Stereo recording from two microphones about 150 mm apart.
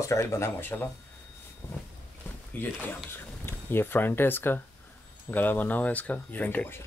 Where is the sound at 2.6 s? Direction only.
10° left (ahead or behind).